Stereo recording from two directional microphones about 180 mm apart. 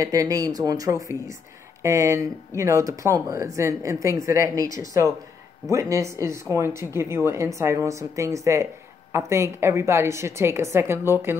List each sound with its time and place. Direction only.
0.0 s speech: 20° right (ahead or behind)